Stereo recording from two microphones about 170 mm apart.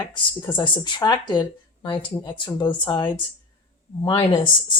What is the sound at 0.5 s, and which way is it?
Speech, 25° left (ahead or behind).